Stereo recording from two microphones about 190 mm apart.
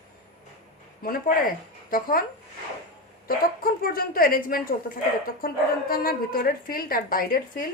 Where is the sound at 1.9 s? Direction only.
50° left (ahead or behind).